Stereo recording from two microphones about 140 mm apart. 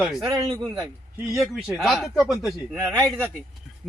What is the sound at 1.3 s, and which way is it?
A man's voice, centre (ahead or behind).